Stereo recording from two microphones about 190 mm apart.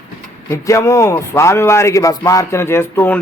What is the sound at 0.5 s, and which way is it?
Speech, 15° left (ahead or behind).